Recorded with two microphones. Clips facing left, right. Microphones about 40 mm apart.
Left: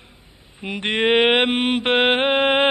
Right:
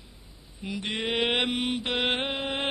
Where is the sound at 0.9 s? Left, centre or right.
Left.